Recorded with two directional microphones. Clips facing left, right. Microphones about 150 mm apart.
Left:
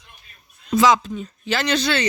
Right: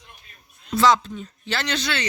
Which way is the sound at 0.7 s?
15° left (ahead or behind).